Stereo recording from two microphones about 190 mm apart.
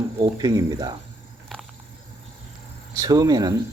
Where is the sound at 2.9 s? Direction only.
20° right (ahead or behind).